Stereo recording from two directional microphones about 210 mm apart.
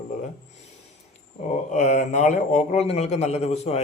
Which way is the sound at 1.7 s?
35° left (ahead or behind).